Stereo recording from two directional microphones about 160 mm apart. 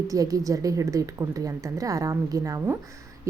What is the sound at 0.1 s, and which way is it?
A woman's voice, 20° right (ahead or behind).